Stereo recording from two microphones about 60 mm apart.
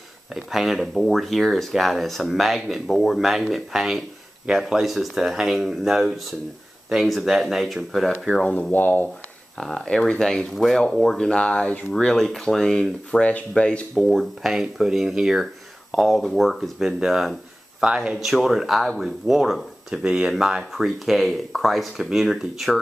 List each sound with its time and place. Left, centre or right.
0.3 s speech: centre
8.4 s speech: left
9.6 s speech: centre
13.9 s a man's voice: centre
18.1 s speech: centre
20.0 s speech: centre